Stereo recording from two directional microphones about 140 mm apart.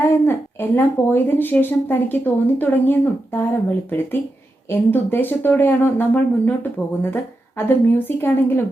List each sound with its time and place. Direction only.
0.0 s speech: 15° left (ahead or behind)